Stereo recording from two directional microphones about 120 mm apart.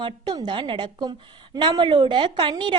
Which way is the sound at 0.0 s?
40° right (ahead or behind).